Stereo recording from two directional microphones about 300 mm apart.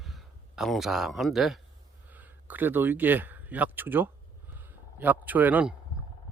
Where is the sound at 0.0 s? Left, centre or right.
Centre.